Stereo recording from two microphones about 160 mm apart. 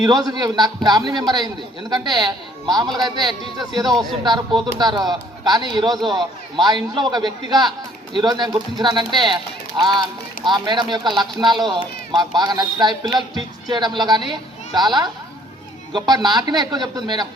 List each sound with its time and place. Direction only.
0.0 s speech: 25° right (ahead or behind)